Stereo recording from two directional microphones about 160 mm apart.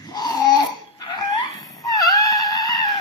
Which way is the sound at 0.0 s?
25° left (ahead or behind).